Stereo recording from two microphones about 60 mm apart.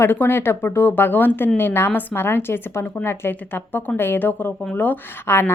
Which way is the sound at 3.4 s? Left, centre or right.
Left.